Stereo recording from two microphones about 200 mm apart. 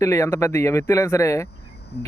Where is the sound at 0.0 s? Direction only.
15° left (ahead or behind).